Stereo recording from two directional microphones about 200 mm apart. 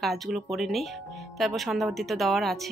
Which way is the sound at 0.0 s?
Centre (ahead or behind).